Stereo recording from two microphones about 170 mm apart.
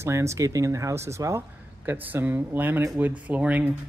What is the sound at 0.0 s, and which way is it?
Speech, 15° right (ahead or behind).